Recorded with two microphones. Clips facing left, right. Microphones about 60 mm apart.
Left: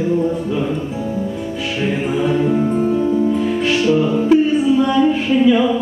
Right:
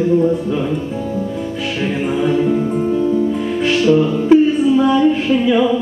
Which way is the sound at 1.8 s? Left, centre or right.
Centre.